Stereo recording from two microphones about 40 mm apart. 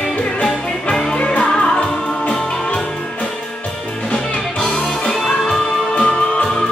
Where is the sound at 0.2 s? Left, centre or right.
Left.